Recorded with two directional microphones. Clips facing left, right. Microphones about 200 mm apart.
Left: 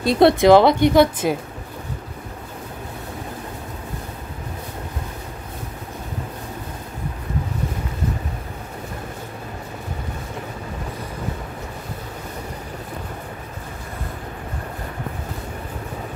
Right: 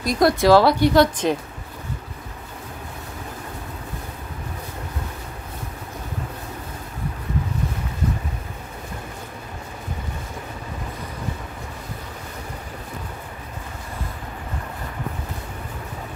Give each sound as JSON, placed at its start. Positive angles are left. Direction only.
{"t": 0.0, "sound": "speech", "side_deg": 25}
{"t": 1.2, "sound": "speech", "side_deg": 10}